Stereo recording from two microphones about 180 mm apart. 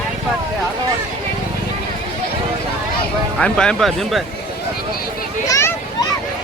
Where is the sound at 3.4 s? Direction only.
5° left (ahead or behind).